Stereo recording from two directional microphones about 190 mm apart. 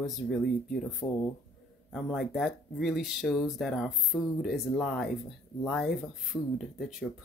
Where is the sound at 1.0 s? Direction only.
15° left (ahead or behind).